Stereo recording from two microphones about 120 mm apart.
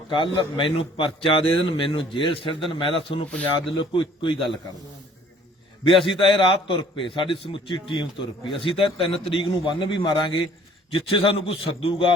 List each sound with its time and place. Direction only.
0.1 s a man's voice: 45° left (ahead or behind)
6.1 s a man's voice: 45° left (ahead or behind)